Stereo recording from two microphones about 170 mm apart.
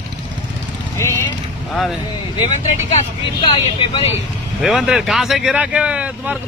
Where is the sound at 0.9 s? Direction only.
15° left (ahead or behind).